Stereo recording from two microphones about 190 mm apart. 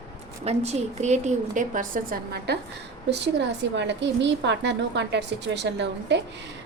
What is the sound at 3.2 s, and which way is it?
A woman's voice, 65° right (ahead or behind).